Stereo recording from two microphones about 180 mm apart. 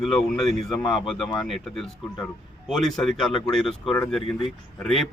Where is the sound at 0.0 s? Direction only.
Centre (ahead or behind).